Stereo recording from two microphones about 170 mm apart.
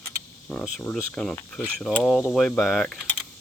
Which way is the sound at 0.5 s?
5° left (ahead or behind).